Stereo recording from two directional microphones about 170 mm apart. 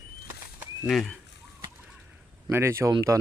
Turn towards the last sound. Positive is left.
turn(degrees=-20)  # may be behind; listen again after turning